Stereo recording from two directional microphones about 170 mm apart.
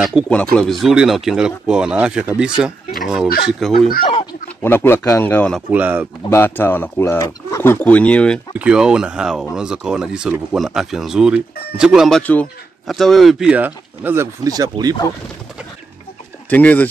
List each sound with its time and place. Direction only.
0.2 s speech: centre (ahead or behind)
4.6 s speech: 10° left (ahead or behind)
5.7 s speech: 10° right (ahead or behind)
6.3 s speech: 10° left (ahead or behind)
8.5 s speech: 5° right (ahead or behind)
12.2 s speech: 10° left (ahead or behind); by 15.0 s 20° right (ahead or behind)
16.4 s speech: 10° left (ahead or behind)